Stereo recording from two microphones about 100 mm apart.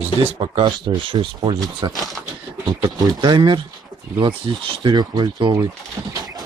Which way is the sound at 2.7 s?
50° right (ahead or behind).